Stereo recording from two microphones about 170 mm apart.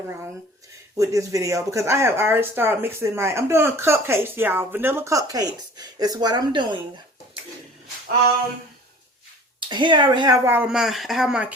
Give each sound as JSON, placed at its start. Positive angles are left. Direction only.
{"t": 0.9, "sound": "speech", "side_deg": -20}
{"t": 9.6, "sound": "speech", "side_deg": -30}